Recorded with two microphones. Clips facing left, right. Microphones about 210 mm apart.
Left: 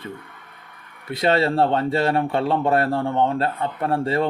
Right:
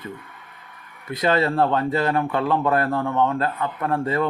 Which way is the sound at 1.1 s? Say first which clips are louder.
Left 1 dB; 30° left (ahead or behind).